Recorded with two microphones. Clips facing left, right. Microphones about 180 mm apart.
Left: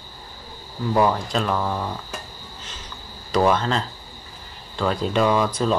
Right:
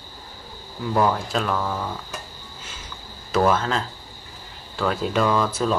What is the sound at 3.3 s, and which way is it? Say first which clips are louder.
Speech: left 1 dB; 5° right (ahead or behind).